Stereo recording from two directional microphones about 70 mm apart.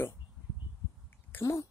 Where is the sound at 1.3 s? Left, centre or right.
Left.